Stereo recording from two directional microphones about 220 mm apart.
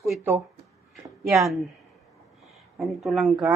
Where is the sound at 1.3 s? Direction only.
Centre (ahead or behind).